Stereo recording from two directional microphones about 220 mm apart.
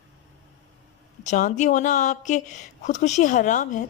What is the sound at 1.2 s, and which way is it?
Speech, 35° left (ahead or behind).